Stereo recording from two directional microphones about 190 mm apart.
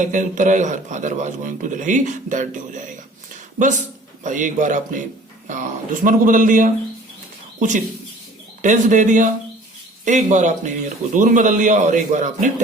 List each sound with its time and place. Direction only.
0.0 s a man's voice: 40° right (ahead or behind)
8.6 s a man's voice: 40° right (ahead or behind)